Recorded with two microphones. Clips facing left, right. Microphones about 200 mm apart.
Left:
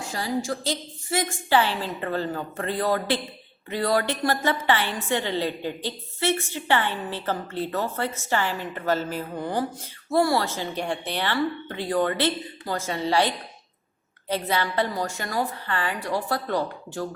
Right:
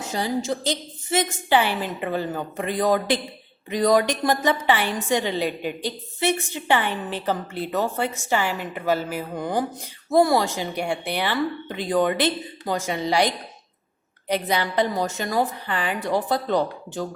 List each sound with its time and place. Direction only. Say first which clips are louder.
0.0 s a woman's voice: right 2 dB; 20° right (ahead or behind)